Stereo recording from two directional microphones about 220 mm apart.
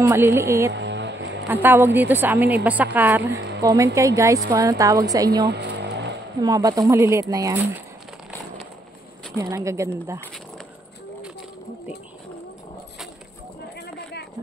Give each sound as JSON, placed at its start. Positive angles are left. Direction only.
{"t": 0.0, "sound": "speech", "side_deg": -10}
{"t": 0.7, "sound": "music", "side_deg": -55}
{"t": 1.5, "sound": "speech", "side_deg": -10}
{"t": 3.3, "sound": "a sound", "side_deg": -50}
{"t": 3.6, "sound": "speech", "side_deg": -15}
{"t": 5.5, "sound": "a sound", "side_deg": -50}
{"t": 6.4, "sound": "speech", "side_deg": -15}
{"t": 9.4, "sound": "speech", "side_deg": -15}
{"t": 13.7, "sound": "a sound", "side_deg": 50}